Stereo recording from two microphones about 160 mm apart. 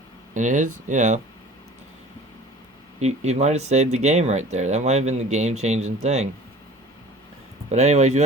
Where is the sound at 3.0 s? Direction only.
45° right (ahead or behind).